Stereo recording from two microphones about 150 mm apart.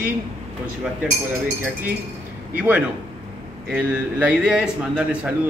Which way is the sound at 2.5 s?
10° right (ahead or behind).